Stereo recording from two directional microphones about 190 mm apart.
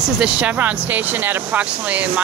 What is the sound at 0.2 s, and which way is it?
Speech, 5° right (ahead or behind).